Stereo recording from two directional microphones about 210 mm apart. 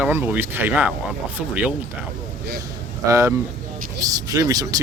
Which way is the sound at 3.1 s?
15° right (ahead or behind).